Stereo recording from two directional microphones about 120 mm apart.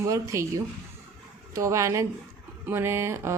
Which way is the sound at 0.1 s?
25° right (ahead or behind).